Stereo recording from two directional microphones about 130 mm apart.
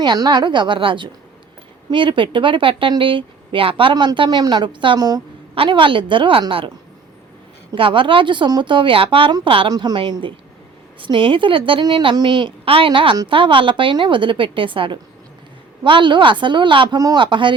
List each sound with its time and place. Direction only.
0.0 s speech: 35° right (ahead or behind)
5.5 s speech: 40° right (ahead or behind)
7.8 s a woman's voice: 40° right (ahead or behind)